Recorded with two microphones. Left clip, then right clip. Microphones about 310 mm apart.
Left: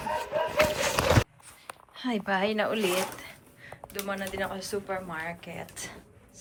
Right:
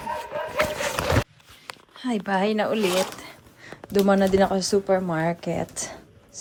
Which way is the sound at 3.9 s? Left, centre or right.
Right.